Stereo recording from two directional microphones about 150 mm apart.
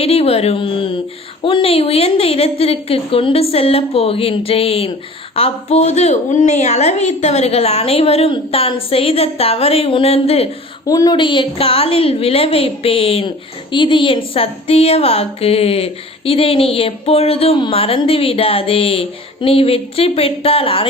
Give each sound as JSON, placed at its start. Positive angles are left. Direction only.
{"t": 0.0, "sound": "a woman's voice", "side_deg": 40}
{"t": 10.8, "sound": "a woman's voice", "side_deg": 25}